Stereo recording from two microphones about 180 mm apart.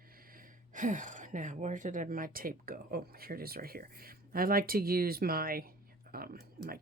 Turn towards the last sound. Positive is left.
turn(degrees=-55)  # may be behind; listen again after turning